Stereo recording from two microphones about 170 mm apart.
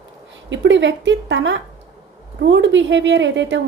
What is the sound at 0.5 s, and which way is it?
A woman's voice, 90° right.